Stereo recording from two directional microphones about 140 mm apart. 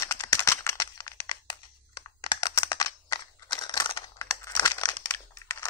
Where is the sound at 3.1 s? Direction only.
35° left (ahead or behind).